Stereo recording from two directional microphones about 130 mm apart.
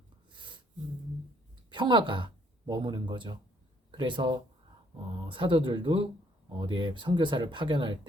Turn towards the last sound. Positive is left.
turn(degrees=-40)  # may be behind; listen again after turning